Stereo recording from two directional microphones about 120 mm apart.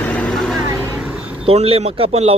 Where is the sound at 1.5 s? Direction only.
50° right (ahead or behind).